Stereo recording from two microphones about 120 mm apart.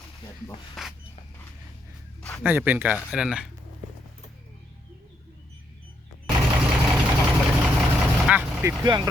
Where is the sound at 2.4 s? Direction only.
15° right (ahead or behind).